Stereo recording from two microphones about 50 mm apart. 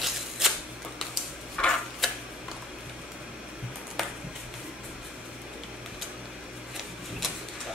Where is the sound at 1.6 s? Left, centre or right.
Centre.